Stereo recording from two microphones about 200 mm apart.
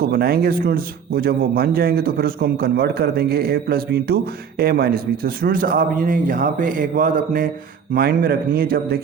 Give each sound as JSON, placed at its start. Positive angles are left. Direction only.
{"t": 0.0, "sound": "speech", "side_deg": -50}